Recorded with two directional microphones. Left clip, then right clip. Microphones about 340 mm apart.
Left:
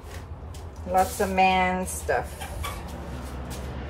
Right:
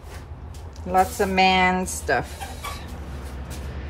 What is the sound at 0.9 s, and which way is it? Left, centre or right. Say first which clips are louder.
Speech: right 3 dB; right.